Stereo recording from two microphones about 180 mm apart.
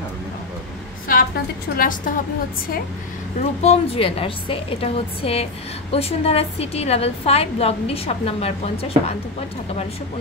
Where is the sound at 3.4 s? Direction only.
35° left (ahead or behind).